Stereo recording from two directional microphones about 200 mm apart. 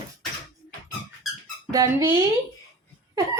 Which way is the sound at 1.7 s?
15° right (ahead or behind).